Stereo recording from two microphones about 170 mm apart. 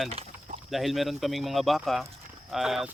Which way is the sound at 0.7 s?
Centre (ahead or behind).